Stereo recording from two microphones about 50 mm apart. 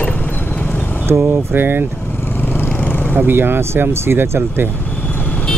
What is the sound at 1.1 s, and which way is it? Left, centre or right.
Speech, right.